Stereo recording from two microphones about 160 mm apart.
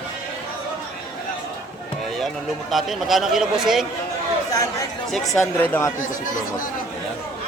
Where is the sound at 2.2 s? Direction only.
Centre (ahead or behind).